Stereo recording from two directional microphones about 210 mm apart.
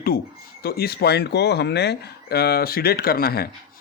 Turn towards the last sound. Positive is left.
turn(degrees=45)  # may be behind; listen again after turning